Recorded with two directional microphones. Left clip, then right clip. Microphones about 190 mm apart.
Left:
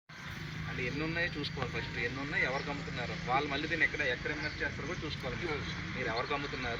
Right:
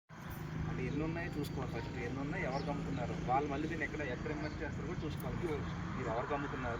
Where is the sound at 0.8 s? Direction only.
15° right (ahead or behind).